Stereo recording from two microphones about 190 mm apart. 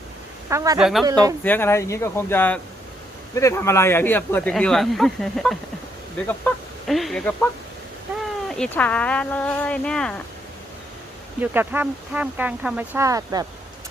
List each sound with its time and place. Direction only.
0.5 s speech: 15° right (ahead or behind)
0.8 s speech: centre (ahead or behind)
1.5 s speech: 10° left (ahead or behind)
8.4 s speech: 5° left (ahead or behind)
11.3 s speech: 10° right (ahead or behind)